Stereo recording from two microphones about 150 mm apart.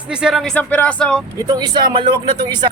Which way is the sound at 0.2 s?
5° right (ahead or behind).